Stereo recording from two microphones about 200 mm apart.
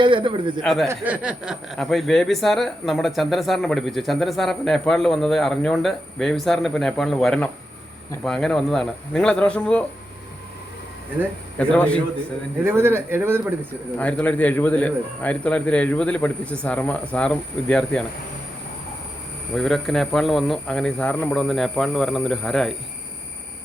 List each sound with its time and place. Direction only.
0.0 s a man's voice: 25° right (ahead or behind)
0.6 s speech: centre (ahead or behind)
11.7 s speech: 5° left (ahead or behind)
12.6 s speech: 10° right (ahead or behind)
14.0 s speech: 5° left (ahead or behind)
19.5 s speech: centre (ahead or behind)